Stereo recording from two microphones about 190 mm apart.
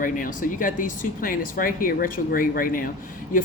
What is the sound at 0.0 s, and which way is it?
Speech, 45° left (ahead or behind).